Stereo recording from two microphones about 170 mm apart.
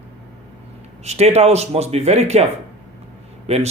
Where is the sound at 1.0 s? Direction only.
40° right (ahead or behind).